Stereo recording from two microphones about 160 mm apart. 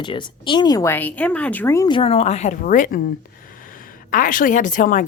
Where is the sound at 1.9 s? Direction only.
35° left (ahead or behind); by 3.0 s 55° left (ahead or behind).